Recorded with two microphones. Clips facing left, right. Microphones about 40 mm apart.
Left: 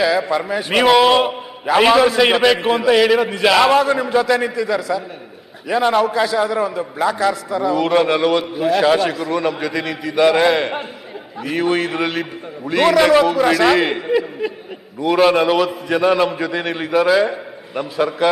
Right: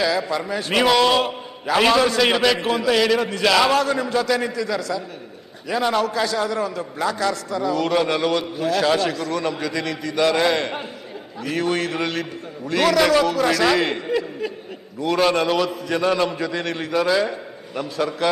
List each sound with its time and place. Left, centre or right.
0.0 s a man's voice: centre